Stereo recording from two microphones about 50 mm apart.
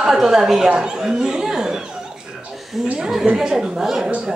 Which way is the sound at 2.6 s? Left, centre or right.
Centre.